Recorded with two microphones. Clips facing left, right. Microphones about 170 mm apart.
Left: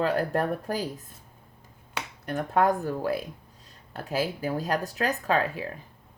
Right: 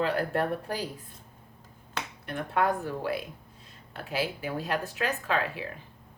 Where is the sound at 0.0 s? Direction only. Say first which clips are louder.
Left 2 dB; 40° left (ahead or behind).